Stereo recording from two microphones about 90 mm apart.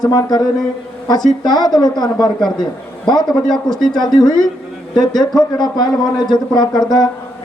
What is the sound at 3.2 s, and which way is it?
Speech, 5° left (ahead or behind).